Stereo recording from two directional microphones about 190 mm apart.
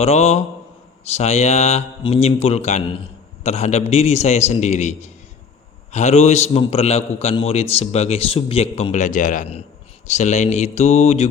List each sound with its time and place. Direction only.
0.0 s a man's voice: 35° left (ahead or behind)